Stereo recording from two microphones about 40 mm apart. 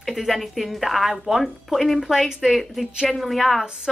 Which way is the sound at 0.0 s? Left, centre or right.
Centre.